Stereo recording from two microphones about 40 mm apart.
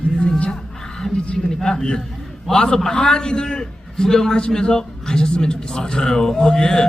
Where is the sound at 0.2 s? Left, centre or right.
Left.